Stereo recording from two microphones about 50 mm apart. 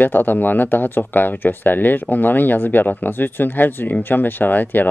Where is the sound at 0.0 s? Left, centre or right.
Left.